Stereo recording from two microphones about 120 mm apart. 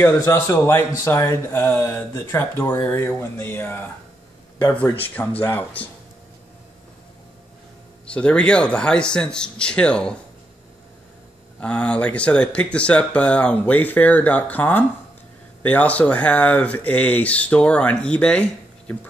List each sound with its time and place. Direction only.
0.0 s speech: 25° left (ahead or behind)
5.4 s speech: 20° left (ahead or behind)
8.1 s speech: 10° left (ahead or behind)
11.6 s speech: 10° left (ahead or behind)